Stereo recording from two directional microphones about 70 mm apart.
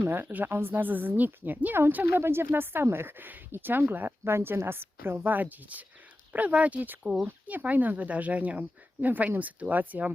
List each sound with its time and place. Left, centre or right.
0.0 s a woman's voice: right